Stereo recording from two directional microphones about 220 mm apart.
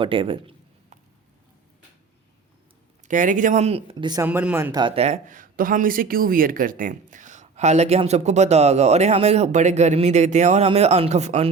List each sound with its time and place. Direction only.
0.0 s a sound: 25° right (ahead or behind)
3.1 s speech: 35° right (ahead or behind); by 4.3 s 20° right (ahead or behind)
4.3 s speech: 10° right (ahead or behind); by 11.5 s 30° right (ahead or behind)